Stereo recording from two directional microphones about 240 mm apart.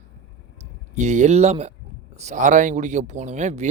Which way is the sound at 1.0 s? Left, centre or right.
Right.